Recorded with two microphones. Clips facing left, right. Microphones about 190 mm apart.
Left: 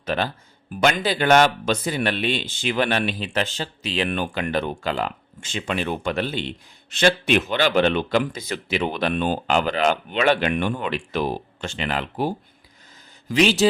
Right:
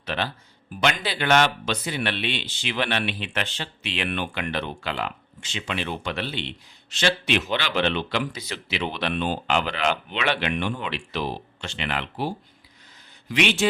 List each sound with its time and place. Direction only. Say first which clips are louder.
0.0 s speech: left 4 dB; 45° left (ahead or behind)